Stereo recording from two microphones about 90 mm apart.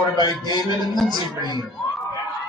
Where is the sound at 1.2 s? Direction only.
45° right (ahead or behind).